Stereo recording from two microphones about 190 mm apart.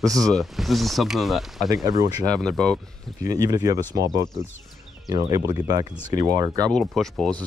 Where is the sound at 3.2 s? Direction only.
20° right (ahead or behind).